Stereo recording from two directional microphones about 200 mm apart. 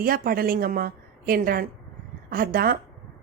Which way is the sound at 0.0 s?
50° right (ahead or behind).